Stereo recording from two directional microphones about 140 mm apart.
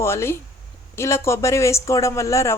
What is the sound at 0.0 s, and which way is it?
Speech, 20° left (ahead or behind).